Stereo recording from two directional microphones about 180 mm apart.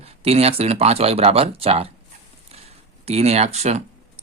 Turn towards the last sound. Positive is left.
turn(degrees=-35)  # may be behind; listen again after turning